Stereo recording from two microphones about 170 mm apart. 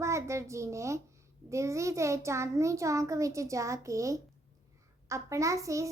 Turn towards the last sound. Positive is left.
turn(degrees=-20)  # may be behind; listen again after turning